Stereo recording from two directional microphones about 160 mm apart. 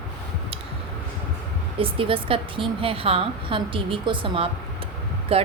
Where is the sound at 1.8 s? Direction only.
35° right (ahead or behind).